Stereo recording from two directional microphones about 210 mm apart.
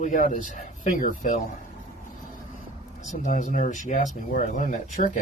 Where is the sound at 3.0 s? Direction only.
35° left (ahead or behind).